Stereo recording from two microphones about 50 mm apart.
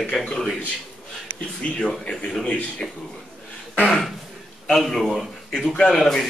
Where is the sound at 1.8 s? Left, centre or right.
Centre.